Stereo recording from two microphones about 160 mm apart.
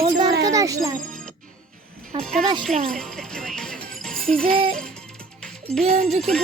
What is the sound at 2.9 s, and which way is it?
Music, 5° left (ahead or behind).